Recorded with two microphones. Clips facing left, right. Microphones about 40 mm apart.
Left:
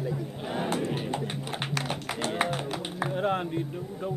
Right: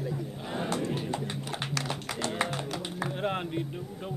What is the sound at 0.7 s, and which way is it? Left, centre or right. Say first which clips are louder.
Speech: left 2 dB; left.